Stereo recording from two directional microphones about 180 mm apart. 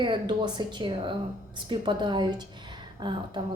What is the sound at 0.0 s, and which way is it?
A woman's voice, 25° right (ahead or behind).